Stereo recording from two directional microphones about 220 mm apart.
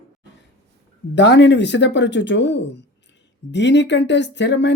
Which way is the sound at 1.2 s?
55° left (ahead or behind).